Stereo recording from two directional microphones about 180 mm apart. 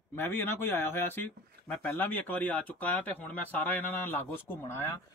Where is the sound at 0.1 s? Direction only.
10° left (ahead or behind).